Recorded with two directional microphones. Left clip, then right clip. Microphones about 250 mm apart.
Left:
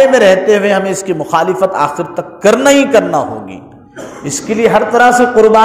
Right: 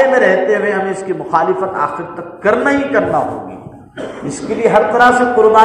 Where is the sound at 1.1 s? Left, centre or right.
Left.